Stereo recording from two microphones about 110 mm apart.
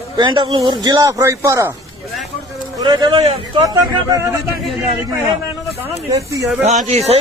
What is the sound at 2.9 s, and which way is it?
Speech, 40° right (ahead or behind).